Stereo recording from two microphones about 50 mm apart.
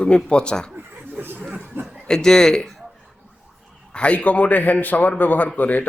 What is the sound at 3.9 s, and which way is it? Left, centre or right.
Speech, left.